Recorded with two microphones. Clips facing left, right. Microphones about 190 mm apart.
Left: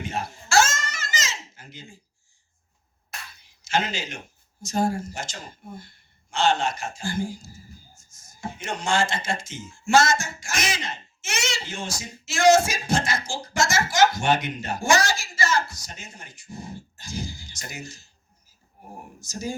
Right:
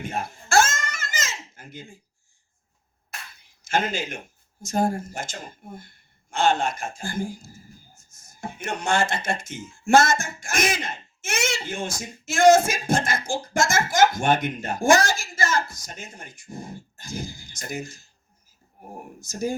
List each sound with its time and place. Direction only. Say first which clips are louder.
0.0 s a sound: even; 55° right (ahead or behind)
3.6 s a man's voice: right 1 dB; 55° right (ahead or behind)
19.2 s speech: right 4 dB; 55° right (ahead or behind)